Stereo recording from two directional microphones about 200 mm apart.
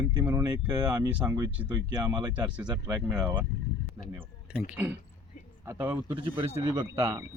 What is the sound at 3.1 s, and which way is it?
Speech, 5° right (ahead or behind).